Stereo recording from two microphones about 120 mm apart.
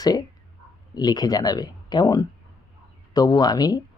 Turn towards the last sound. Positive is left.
turn(degrees=35)  # may be behind; listen again after turning